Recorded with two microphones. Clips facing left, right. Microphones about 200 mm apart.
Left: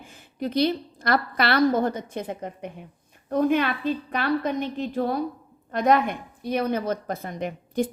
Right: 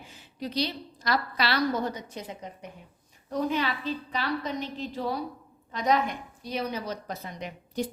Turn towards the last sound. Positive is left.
turn(degrees=55)  # may be behind; listen again after turning